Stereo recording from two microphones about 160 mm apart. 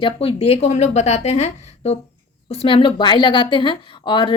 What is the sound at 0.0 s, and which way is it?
A woman's voice, 35° left (ahead or behind).